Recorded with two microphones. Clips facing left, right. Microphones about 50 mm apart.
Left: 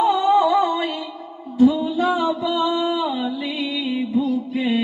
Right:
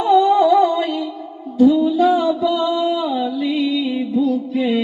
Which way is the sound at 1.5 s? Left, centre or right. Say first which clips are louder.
Right 3 dB; centre.